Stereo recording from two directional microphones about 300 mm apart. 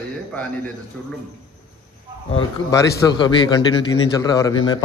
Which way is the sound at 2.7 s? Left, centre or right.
Centre.